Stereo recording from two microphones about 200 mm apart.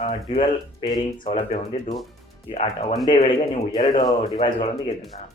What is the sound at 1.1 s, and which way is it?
Speech, 30° left (ahead or behind).